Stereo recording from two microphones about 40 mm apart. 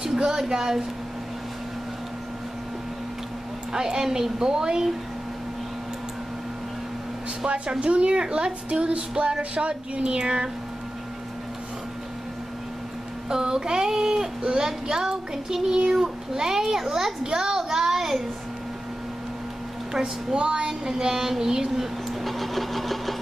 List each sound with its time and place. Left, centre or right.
0.0 s speech: centre
3.7 s speech: centre
7.4 s a woman's voice: right
13.3 s speech: centre
19.9 s speech: centre
22.2 s engine: centre